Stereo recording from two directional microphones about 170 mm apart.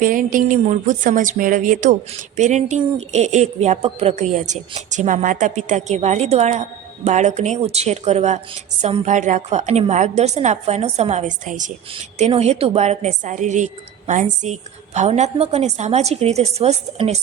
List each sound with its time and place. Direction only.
0.0 s a woman's voice: 50° right (ahead or behind)